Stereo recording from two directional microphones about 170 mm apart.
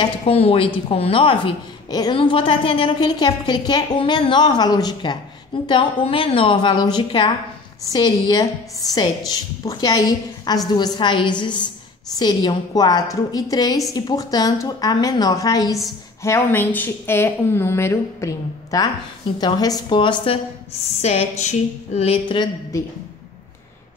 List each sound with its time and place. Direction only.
0.0 s a woman's voice: 35° left (ahead or behind)
21.0 s a woman's voice: 40° left (ahead or behind)